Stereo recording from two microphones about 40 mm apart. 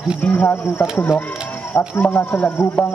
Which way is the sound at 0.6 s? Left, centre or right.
Left.